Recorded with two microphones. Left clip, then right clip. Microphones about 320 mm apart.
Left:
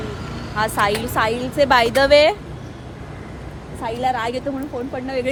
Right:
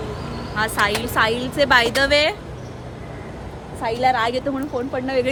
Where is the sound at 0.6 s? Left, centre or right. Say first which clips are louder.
Left 1 dB; centre.